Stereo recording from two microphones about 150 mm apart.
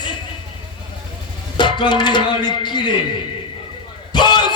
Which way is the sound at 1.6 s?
30° left (ahead or behind).